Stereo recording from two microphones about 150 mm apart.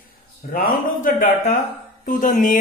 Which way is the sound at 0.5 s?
70° left (ahead or behind).